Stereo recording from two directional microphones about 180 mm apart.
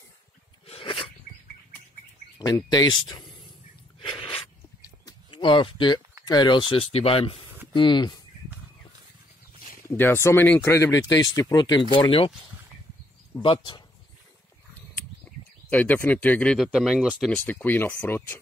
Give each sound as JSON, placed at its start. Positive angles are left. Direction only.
{"t": 0.7, "sound": "a sound", "side_deg": 30}
{"t": 2.3, "sound": "speech", "side_deg": 25}
{"t": 4.0, "sound": "a sound", "side_deg": 30}
{"t": 6.2, "sound": "speech", "side_deg": 25}
{"t": 9.8, "sound": "speech", "side_deg": 15}
{"t": 13.4, "sound": "speech", "side_deg": 25}
{"t": 15.7, "sound": "speech", "side_deg": 10}
{"t": 17.5, "sound": "speech", "side_deg": 10}